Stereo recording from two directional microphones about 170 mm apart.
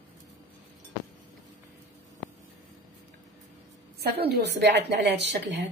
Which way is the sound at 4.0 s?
70° right (ahead or behind).